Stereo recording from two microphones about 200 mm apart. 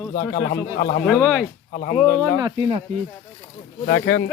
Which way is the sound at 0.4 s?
55° left (ahead or behind).